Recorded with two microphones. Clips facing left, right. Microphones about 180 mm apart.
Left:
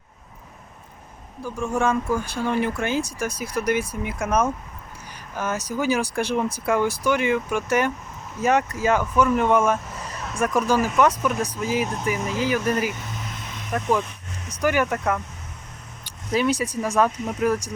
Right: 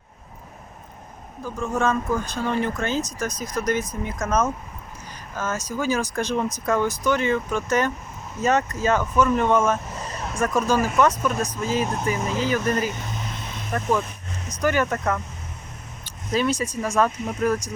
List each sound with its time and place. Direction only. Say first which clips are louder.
1.5 s speech: left 1 dB; 15° left (ahead or behind)